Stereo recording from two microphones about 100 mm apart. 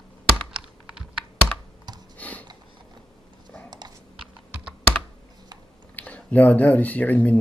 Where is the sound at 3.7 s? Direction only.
45° right (ahead or behind).